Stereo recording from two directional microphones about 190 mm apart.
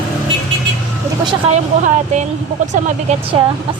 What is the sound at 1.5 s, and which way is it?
Speech, 40° right (ahead or behind).